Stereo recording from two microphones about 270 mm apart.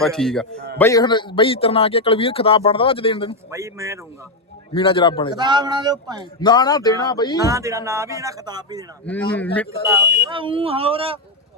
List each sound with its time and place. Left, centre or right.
0.0 s a man's voice: centre
3.5 s speech: centre
4.7 s a man's voice: centre
5.3 s speech: centre
6.4 s speech: centre
7.3 s speech: centre
9.0 s a man's voice: centre
9.8 s speech: centre